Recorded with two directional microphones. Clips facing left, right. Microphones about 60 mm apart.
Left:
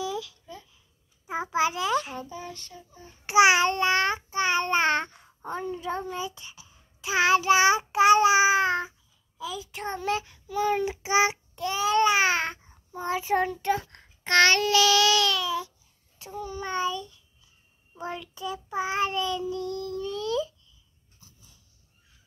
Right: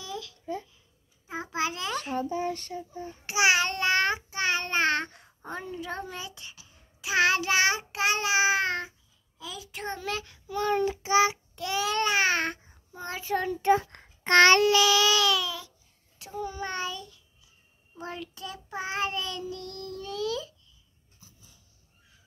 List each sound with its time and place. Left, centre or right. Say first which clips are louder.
0.0 s babbling: left 6 dB; centre
1.2 s child singing: left 5 dB; centre
2.2 s child singing: right 9 dB; right
3.3 s a child's voice: left 5 dB; left
3.7 s child singing: left 2 dB; centre
5.4 s child singing: left 4 dB; centre
11.0 s child singing: even; centre
11.5 s speech: left 4 dB; centre
13.0 s a child's voice: left 5 dB; left
13.6 s a child's voice: right 4 dB; centre
16.2 s child singing: right 1 dB; centre
19.5 s child singing: left 7 dB; centre
20.0 s baby cry: left 2 dB; centre